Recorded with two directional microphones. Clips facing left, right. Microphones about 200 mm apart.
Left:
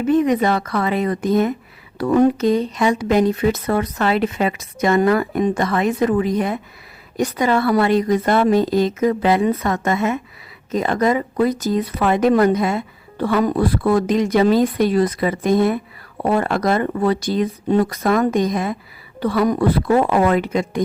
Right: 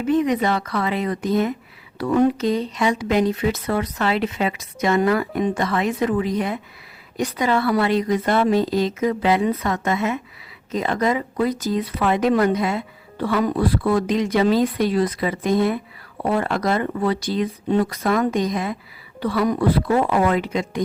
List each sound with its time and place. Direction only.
0.1 s speech: 50° left (ahead or behind)